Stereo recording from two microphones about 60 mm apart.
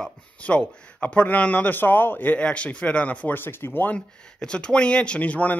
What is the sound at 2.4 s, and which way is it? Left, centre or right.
Speech, left.